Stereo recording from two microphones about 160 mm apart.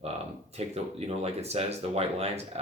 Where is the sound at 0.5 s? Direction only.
40° right (ahead or behind).